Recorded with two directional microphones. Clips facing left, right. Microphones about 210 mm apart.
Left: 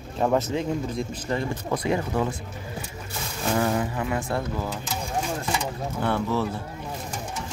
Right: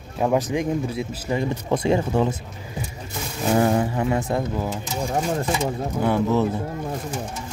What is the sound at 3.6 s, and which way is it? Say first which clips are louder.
Speech: right 5 dB; 30° right (ahead or behind).